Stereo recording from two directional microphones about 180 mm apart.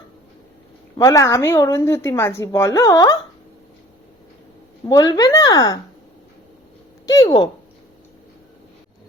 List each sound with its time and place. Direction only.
0.9 s a woman's voice: 20° left (ahead or behind)
4.9 s speech: 20° left (ahead or behind)
7.0 s speech: 20° left (ahead or behind)